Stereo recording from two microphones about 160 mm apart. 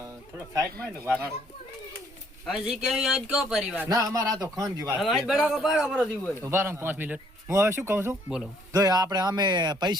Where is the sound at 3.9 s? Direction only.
25° right (ahead or behind).